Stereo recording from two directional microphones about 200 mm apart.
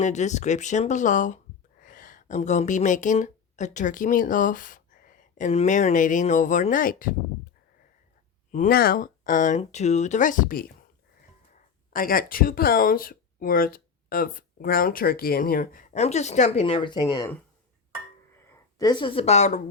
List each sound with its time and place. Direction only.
0.0 s speech: 35° left (ahead or behind)
8.5 s speech: 45° left (ahead or behind); by 17.3 s 20° left (ahead or behind)
18.8 s speech: 20° left (ahead or behind)